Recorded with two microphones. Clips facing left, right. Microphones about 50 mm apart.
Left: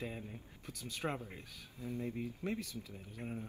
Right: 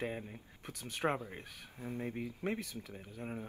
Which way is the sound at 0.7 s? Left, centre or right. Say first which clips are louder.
Right 5 dB; right.